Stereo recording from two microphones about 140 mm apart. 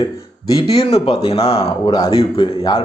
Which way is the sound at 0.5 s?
45° left (ahead or behind).